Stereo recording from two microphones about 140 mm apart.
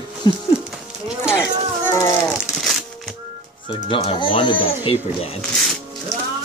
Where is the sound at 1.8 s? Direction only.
20° left (ahead or behind).